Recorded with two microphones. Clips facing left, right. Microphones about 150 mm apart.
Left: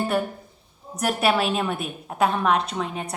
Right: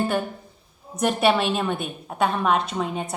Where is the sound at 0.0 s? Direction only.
Centre (ahead or behind).